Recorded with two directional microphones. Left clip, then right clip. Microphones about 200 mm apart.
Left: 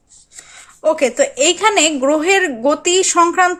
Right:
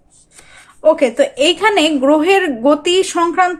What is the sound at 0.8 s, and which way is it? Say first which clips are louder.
Speech: right 3 dB; 15° left (ahead or behind).